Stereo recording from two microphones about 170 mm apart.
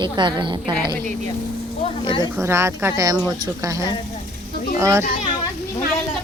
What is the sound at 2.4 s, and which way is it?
Speech, 15° right (ahead or behind).